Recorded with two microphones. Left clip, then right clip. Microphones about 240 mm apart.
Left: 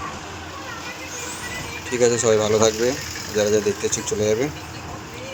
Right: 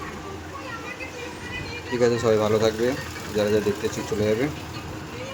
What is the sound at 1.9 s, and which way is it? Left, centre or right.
Speech, left.